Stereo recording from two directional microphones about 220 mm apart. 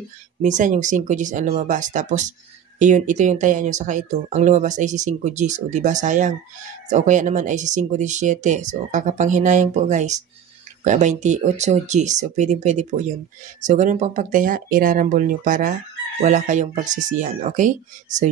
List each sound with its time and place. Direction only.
0.4 s speech: 35° right (ahead or behind)